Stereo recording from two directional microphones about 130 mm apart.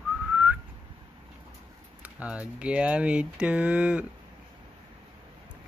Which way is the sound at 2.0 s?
10° right (ahead or behind).